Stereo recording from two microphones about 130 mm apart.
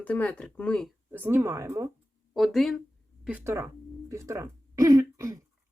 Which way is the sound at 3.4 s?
20° right (ahead or behind).